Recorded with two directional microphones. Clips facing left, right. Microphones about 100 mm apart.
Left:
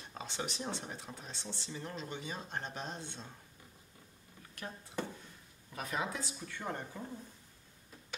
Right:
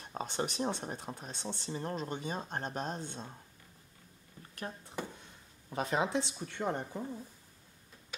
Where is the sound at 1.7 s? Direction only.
40° right (ahead or behind).